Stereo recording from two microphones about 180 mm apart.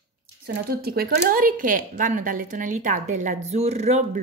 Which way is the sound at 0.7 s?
60° right (ahead or behind).